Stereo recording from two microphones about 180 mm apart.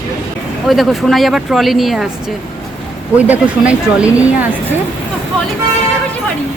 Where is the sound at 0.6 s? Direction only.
Centre (ahead or behind).